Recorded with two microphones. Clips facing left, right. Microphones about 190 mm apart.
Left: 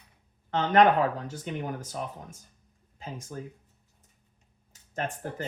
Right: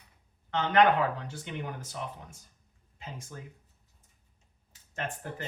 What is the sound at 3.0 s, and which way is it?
Speech, 40° left (ahead or behind).